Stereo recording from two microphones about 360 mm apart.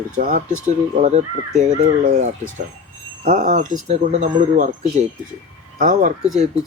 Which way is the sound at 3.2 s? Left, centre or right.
Right.